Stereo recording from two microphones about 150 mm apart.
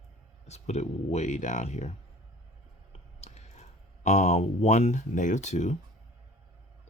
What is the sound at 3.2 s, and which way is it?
Speech, 50° left (ahead or behind).